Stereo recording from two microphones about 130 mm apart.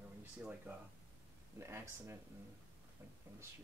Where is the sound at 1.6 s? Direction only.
20° right (ahead or behind).